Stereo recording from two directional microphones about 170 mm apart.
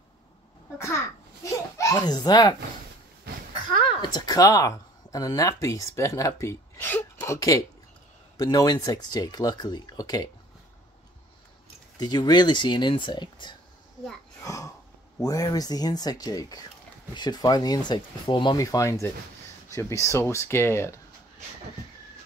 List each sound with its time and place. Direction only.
0.7 s a child's voice: 15° left (ahead or behind)
4.1 s speech: 20° left (ahead or behind)
12.0 s speech: 25° left (ahead or behind)
14.4 s a sound: 20° left (ahead or behind)
15.1 s speech: 20° left (ahead or behind)